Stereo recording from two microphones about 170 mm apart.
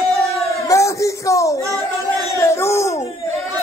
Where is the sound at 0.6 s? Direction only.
20° left (ahead or behind).